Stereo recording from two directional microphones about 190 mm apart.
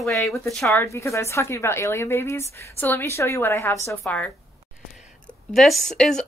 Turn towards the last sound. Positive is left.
turn(degrees=5)  # may be behind; listen again after turning